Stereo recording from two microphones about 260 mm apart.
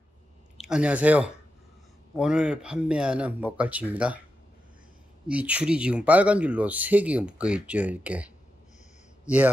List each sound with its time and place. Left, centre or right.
0.6 s speech: centre
5.3 s speech: centre